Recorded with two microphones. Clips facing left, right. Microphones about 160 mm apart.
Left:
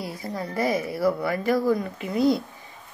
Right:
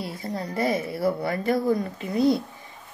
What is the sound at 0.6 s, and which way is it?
Speech, 25° right (ahead or behind).